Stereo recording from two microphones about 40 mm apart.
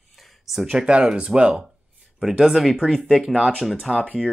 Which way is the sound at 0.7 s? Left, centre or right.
Right.